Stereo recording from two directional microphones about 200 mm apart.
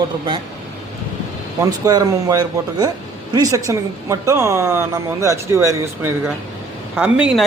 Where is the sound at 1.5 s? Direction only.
20° right (ahead or behind).